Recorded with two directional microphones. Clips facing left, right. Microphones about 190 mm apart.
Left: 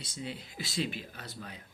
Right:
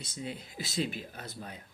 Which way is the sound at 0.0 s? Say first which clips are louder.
Right 1 dB; 50° right (ahead or behind).